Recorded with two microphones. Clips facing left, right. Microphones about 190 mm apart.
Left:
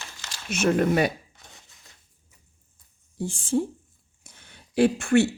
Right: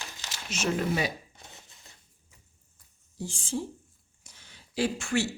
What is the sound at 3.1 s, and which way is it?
Speech, 55° left (ahead or behind).